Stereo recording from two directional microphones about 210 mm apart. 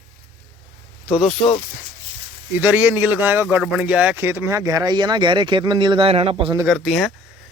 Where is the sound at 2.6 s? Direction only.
10° right (ahead or behind); by 6.6 s 25° right (ahead or behind).